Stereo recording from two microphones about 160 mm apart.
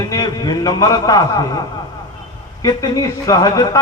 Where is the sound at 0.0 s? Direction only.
25° left (ahead or behind).